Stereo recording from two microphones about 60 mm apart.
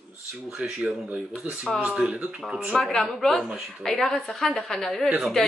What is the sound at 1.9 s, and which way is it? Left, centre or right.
Speech, centre.